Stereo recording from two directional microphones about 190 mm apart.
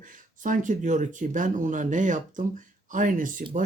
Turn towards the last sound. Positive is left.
turn(degrees=-45)  # may be behind; listen again after turning